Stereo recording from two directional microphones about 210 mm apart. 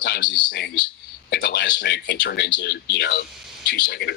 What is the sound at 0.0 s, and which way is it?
Speech, 55° left (ahead or behind).